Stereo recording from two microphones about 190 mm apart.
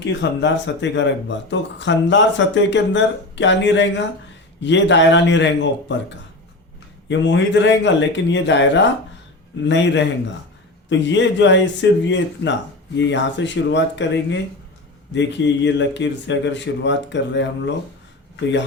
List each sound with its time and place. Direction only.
0.0 s speech: 70° left (ahead or behind)
7.1 s speech: 70° left (ahead or behind)